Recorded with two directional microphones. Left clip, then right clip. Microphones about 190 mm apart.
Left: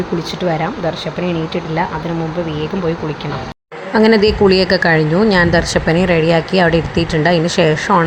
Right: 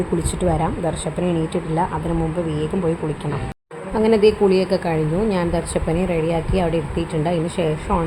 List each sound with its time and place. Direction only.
3.9 s a woman's voice: 20° left (ahead or behind)